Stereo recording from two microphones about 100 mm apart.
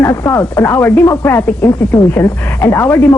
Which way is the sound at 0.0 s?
30° left (ahead or behind).